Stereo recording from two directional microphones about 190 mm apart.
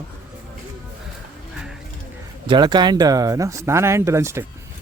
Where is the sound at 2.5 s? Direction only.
25° right (ahead or behind).